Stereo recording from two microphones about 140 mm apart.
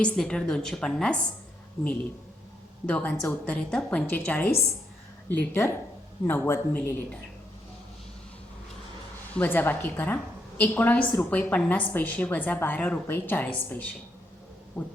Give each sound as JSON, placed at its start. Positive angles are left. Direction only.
{"t": 0.0, "sound": "a woman's voice", "side_deg": 5}
{"t": 2.8, "sound": "a woman's voice", "side_deg": 10}
{"t": 9.3, "sound": "a woman's voice", "side_deg": 15}